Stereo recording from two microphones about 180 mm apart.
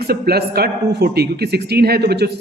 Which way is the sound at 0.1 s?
60° right (ahead or behind).